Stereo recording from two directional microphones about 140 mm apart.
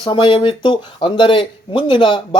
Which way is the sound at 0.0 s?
35° left (ahead or behind).